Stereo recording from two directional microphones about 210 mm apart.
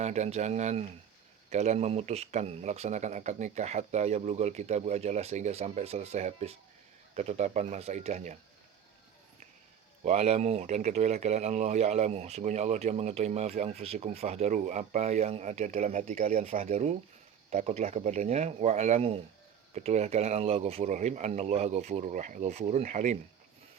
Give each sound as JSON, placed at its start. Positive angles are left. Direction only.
{"t": 0.0, "sound": "speech", "side_deg": -35}
{"t": 10.0, "sound": "speech", "side_deg": -30}